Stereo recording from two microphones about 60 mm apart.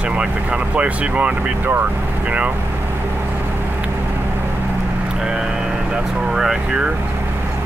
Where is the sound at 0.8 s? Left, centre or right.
Right.